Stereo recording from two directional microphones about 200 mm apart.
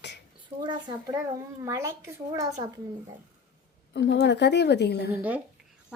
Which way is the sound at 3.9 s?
60° left (ahead or behind).